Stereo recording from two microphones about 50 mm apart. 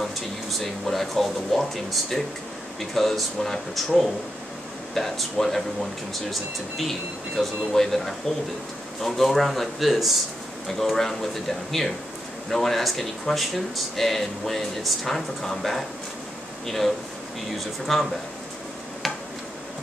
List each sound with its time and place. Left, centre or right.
0.0 s speech: centre
6.8 s speech: centre
12.4 s speech: centre
19.0 s tick-tock: centre